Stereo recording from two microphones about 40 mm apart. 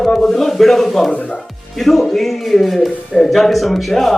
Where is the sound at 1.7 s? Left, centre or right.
Centre.